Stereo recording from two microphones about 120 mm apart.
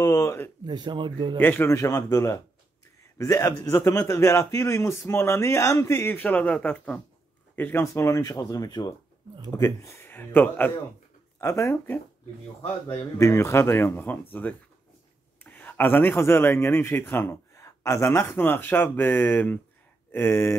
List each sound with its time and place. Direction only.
0.0 s a man's voice: 25° left (ahead or behind)
0.7 s speech: 35° right (ahead or behind)
1.4 s a man's voice: 15° left (ahead or behind)
15.4 s a man's voice: 10° left (ahead or behind)